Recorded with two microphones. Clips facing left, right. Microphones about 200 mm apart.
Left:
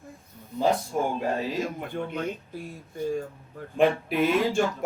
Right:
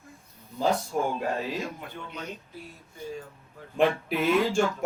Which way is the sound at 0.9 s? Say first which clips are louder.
Left 1 dB; 5° left (ahead or behind).